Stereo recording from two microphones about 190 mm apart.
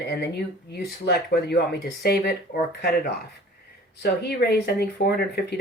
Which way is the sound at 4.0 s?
60° left (ahead or behind).